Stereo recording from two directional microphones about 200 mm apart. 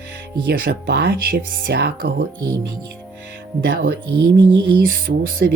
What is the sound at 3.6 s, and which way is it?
Speech, 45° right (ahead or behind).